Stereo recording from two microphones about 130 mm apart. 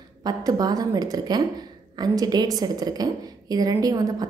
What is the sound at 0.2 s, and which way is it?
A woman's voice, 30° right (ahead or behind).